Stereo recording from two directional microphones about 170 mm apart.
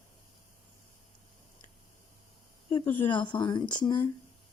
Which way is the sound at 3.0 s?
30° left (ahead or behind).